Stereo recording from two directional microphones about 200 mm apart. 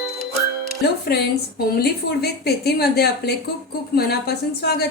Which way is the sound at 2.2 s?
50° left (ahead or behind).